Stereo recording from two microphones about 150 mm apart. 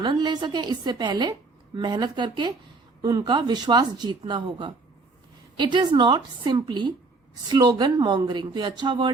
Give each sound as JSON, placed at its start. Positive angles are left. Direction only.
{"t": 0.0, "sound": "a woman's voice", "side_deg": -30}